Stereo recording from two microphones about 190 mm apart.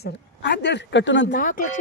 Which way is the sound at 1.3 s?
45° left (ahead or behind).